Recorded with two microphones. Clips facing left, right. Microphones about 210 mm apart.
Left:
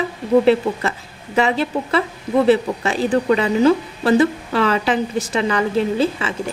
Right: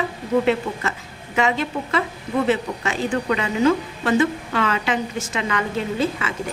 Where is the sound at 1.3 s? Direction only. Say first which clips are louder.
Left 3 dB; 35° left (ahead or behind).